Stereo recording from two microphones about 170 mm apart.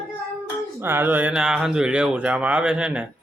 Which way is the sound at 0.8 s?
15° right (ahead or behind).